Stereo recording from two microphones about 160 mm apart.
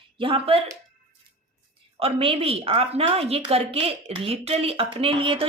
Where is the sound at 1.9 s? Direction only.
35° right (ahead or behind).